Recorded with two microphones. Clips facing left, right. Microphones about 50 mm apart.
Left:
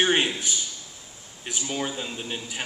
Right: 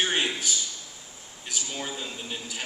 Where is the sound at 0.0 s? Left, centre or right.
Left.